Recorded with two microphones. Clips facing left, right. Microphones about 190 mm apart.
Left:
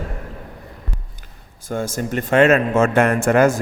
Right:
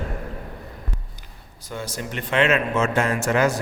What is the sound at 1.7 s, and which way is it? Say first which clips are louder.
A man's voice: left 8 dB; 45° left (ahead or behind).